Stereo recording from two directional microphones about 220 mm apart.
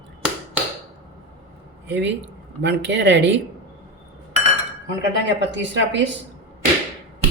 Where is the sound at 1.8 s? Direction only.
50° right (ahead or behind).